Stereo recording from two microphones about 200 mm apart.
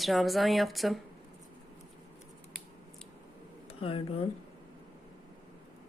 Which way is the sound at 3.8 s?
30° left (ahead or behind).